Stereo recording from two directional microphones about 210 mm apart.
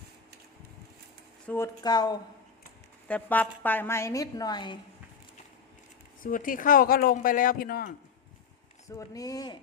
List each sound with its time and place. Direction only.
1.5 s speech: 10° left (ahead or behind)
3.1 s a woman's voice: 10° left (ahead or behind)
6.2 s speech: 40° left (ahead or behind)
9.0 s a woman's voice: 15° left (ahead or behind)